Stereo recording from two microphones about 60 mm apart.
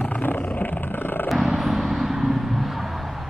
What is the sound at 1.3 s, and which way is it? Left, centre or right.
Vehicle, centre.